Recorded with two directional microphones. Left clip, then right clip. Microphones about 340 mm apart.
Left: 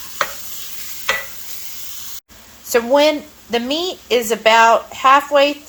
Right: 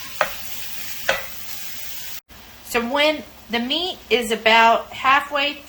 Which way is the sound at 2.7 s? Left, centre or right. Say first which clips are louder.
Left 6 dB; left.